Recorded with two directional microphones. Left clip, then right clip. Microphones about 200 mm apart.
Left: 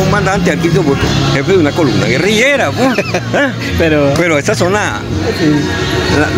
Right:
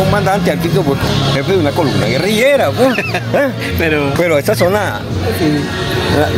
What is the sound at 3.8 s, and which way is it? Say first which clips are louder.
Speech: left 4 dB; 50° left (ahead or behind).